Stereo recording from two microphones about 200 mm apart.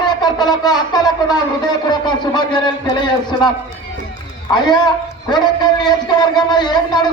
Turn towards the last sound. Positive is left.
turn(degrees=20)  # may be behind; listen again after turning